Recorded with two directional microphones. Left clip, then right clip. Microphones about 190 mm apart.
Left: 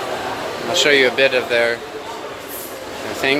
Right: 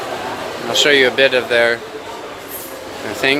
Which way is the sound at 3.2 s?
10° right (ahead or behind).